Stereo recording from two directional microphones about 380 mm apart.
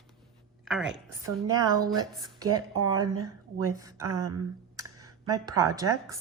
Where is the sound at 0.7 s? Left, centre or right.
Centre.